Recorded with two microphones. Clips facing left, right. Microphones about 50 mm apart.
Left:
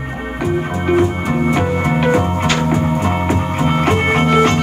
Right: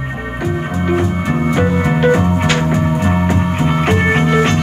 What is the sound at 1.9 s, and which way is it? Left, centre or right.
Music, right.